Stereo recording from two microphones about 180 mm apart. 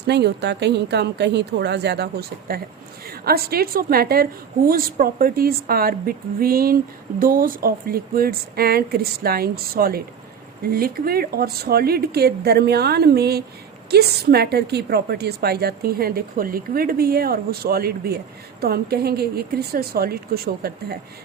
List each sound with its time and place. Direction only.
0.1 s a woman's voice: 70° right (ahead or behind)